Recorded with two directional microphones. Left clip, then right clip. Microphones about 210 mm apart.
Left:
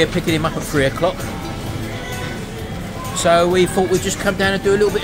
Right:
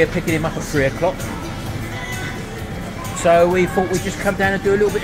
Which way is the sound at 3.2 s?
10° right (ahead or behind).